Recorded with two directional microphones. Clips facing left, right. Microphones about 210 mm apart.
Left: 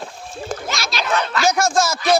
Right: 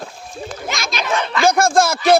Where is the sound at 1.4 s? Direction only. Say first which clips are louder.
Right 5 dB; 55° right (ahead or behind).